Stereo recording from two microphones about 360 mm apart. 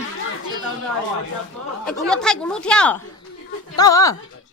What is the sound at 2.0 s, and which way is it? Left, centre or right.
A woman's voice, centre.